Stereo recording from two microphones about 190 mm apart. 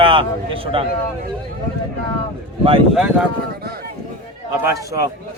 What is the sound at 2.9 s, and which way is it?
Speech, 5° right (ahead or behind).